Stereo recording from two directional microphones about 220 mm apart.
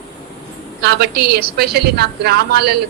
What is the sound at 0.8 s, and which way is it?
A woman's voice, 50° right (ahead or behind).